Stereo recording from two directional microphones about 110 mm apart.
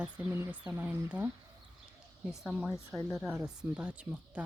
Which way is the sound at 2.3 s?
5° right (ahead or behind).